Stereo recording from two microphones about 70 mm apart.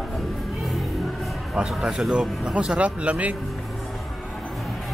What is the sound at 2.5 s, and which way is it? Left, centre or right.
Speech, centre.